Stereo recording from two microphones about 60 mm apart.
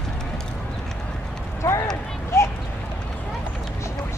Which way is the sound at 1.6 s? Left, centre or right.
Left.